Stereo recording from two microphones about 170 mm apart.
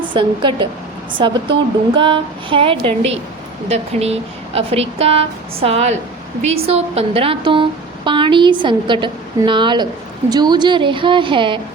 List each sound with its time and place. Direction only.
0.0 s a woman's voice: 30° right (ahead or behind)